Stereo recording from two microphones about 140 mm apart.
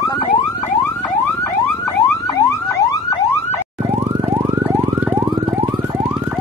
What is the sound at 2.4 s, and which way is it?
Car alarm, 20° left (ahead or behind).